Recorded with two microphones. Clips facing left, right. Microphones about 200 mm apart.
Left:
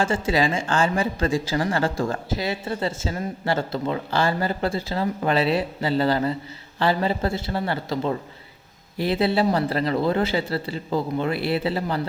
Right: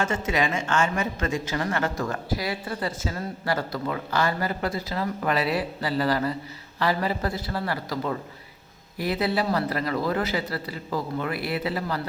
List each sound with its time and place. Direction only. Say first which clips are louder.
0.0 s speech: left 4 dB; 30° left (ahead or behind)